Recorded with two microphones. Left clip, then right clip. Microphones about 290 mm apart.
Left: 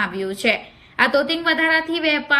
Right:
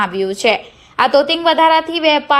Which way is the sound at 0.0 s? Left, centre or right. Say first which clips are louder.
Right 6 dB; centre.